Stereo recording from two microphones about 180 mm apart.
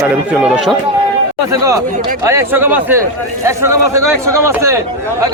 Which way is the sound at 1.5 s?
20° right (ahead or behind).